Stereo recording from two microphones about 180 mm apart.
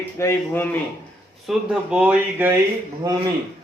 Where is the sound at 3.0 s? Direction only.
20° right (ahead or behind).